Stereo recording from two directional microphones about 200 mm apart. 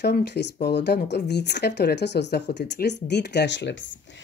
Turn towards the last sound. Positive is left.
turn(degrees=60)  # may be behind; listen again after turning